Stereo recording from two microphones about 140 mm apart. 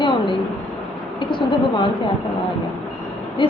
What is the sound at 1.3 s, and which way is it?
Speech, 35° left (ahead or behind).